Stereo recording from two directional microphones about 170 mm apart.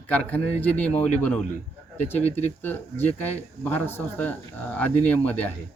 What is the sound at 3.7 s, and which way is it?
Speech, 10° left (ahead or behind).